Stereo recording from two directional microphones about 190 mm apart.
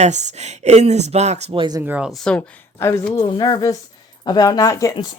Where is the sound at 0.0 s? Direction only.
35° right (ahead or behind).